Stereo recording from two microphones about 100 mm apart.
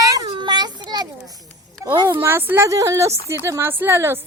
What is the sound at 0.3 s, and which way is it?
Children playing, 50° right (ahead or behind).